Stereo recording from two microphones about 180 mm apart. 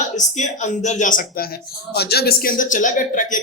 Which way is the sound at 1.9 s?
65° left (ahead or behind).